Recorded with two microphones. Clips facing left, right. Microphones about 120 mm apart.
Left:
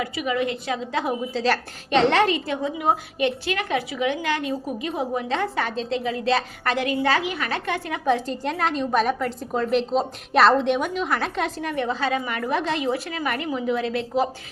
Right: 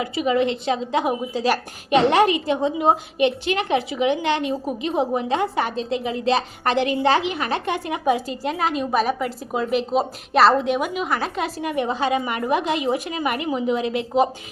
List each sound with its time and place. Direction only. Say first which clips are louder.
0.0 s a woman's voice: right 4 dB; 30° right (ahead or behind)
2.6 s a woman's voice: right 4 dB; 25° right (ahead or behind); by 11.7 s 5° right (ahead or behind)
11.7 s a woman's voice: right 4 dB; 20° right (ahead or behind)